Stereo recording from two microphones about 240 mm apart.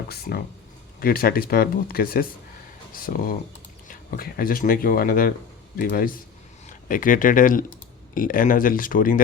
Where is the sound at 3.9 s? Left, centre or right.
Left.